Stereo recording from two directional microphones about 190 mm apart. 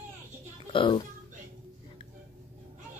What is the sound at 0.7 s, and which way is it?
Speech, 25° left (ahead or behind).